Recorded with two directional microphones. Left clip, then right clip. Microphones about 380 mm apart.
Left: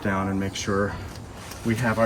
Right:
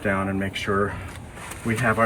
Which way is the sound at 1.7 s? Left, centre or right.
Centre.